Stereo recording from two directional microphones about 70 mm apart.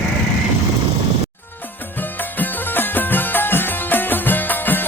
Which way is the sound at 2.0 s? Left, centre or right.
Left.